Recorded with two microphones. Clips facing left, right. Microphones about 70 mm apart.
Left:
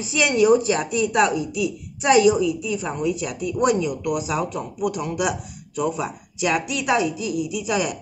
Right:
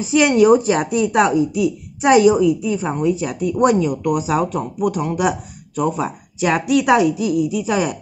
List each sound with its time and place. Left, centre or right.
0.0 s speech: right
4.7 s speech: right